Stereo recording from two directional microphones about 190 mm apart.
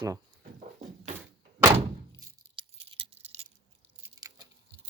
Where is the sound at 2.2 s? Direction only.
20° right (ahead or behind).